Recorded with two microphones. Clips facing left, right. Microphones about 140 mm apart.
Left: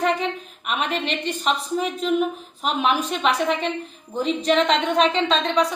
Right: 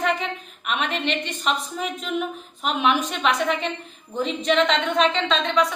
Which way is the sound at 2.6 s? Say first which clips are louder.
Even; centre (ahead or behind).